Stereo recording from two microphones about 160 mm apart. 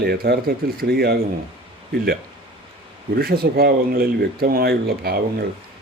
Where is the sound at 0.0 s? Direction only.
80° right.